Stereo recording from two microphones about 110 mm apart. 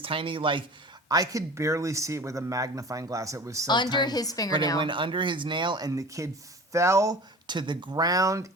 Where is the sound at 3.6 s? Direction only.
40° left (ahead or behind).